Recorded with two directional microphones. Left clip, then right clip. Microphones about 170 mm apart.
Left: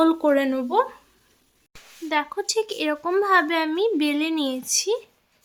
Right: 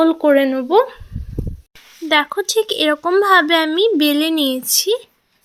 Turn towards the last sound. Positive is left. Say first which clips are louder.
# right 7 dB
turn(degrees=-25)  # may be behind; listen again after turning